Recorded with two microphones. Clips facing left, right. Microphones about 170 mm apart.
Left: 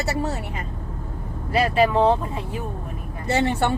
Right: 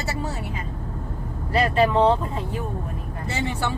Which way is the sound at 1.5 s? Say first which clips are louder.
Left 1 dB; 10° left (ahead or behind).